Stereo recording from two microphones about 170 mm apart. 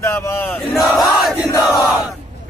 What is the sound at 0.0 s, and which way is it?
Battle cry, 15° left (ahead or behind).